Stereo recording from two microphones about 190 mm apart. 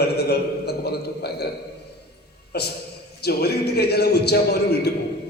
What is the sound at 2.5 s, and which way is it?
A man's voice, 60° left (ahead or behind).